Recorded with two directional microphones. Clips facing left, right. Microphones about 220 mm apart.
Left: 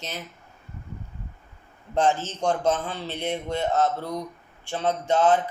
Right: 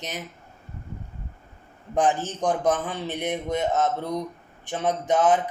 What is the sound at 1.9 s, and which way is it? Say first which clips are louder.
A man's voice: even; 15° right (ahead or behind).